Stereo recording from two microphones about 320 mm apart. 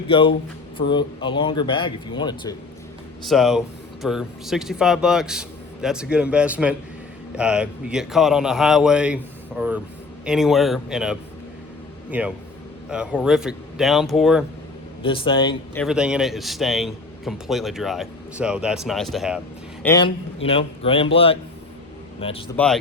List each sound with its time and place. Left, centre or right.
0.1 s speech: centre
3.2 s a man's voice: centre
15.0 s speech: centre
15.8 s a man's voice: centre
19.8 s speech: centre
22.5 s a man's voice: centre